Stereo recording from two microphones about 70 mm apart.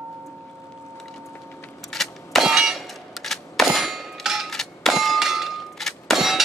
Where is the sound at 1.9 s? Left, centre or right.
Centre.